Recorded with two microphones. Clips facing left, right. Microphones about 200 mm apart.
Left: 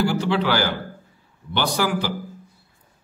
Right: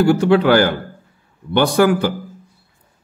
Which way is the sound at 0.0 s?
50° right (ahead or behind).